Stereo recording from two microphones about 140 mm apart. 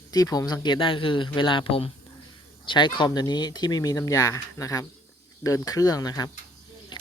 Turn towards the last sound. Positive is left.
turn(degrees=30)  # may be behind; listen again after turning